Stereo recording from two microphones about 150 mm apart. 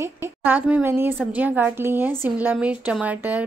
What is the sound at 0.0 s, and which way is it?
A woman's voice, 15° right (ahead or behind).